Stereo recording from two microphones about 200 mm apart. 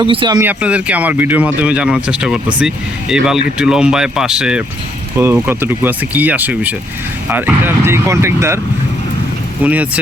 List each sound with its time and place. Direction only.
0.0 s speech: 25° right (ahead or behind)
0.3 s speech: 10° right (ahead or behind)
9.6 s speech: 5° right (ahead or behind)